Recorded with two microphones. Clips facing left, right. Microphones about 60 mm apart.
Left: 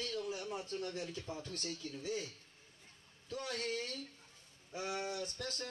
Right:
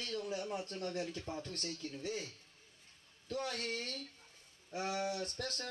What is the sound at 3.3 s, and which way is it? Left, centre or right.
Speech, right.